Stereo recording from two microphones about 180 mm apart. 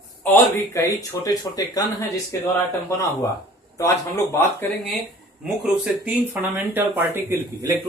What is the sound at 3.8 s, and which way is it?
Speech, 15° left (ahead or behind).